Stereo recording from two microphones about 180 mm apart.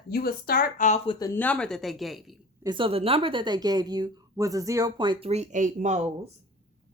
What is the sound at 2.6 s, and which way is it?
Speech, 25° right (ahead or behind).